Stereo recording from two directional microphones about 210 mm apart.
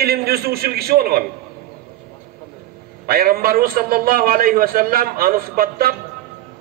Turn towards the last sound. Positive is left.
turn(degrees=-45)  # may be behind; listen again after turning